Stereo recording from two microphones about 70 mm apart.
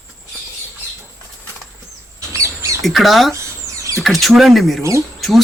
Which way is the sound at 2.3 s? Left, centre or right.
Right.